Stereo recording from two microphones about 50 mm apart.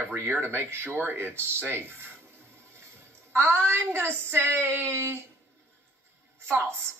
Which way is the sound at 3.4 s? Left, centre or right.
Right.